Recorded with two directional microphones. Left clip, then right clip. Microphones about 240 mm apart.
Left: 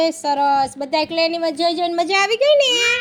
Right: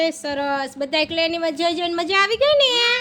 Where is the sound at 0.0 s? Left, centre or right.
Centre.